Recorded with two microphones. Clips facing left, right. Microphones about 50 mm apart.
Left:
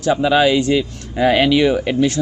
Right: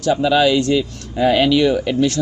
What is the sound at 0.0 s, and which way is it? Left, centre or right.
Speech, left.